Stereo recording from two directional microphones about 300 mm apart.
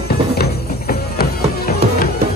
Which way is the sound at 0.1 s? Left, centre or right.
Left.